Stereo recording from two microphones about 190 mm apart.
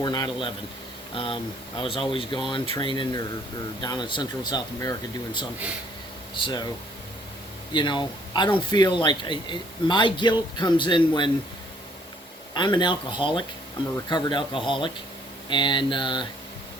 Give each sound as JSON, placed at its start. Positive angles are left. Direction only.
{"t": 0.0, "sound": "speech", "side_deg": 25}
{"t": 7.7, "sound": "speech", "side_deg": 25}
{"t": 12.5, "sound": "speech", "side_deg": 25}